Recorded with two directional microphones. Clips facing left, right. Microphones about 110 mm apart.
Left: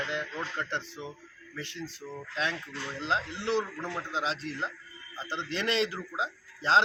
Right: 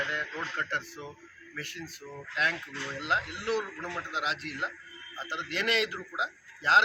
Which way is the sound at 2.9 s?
25° left (ahead or behind).